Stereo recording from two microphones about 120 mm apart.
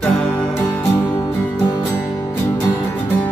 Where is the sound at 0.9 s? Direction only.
25° left (ahead or behind).